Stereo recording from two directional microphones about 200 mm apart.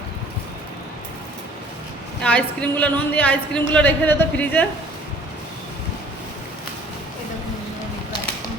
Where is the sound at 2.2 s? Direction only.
5° left (ahead or behind).